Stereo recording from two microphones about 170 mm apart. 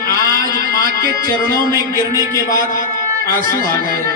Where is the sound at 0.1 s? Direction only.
20° left (ahead or behind).